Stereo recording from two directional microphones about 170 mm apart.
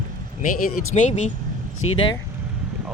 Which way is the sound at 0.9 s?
40° left (ahead or behind).